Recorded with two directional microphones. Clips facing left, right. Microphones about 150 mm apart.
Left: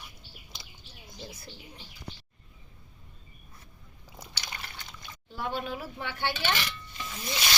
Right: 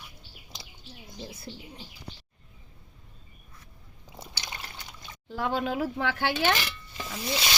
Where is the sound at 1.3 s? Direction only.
30° right (ahead or behind).